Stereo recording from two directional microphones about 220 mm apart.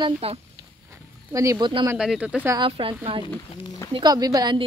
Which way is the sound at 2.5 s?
25° right (ahead or behind).